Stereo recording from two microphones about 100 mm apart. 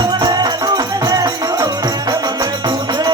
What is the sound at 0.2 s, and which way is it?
Music, 40° right (ahead or behind).